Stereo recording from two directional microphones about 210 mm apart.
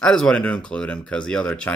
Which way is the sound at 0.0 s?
5° left (ahead or behind).